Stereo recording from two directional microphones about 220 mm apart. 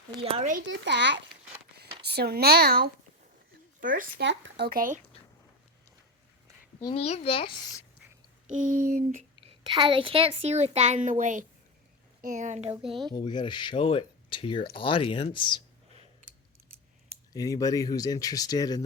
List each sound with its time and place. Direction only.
0.2 s a woman's voice: 25° right (ahead or behind)
0.6 s speech: 55° right (ahead or behind); by 4.0 s 35° right (ahead or behind)
4.2 s speech: 55° right (ahead or behind)
6.7 s a child's voice: 20° left (ahead or behind)
7.0 s speech: 30° left (ahead or behind)
8.9 s a woman's voice: 40° right (ahead or behind)
9.6 s a woman's voice: 20° right (ahead or behind)
13.1 s speech: 20° left (ahead or behind)
17.3 s speech: 15° left (ahead or behind)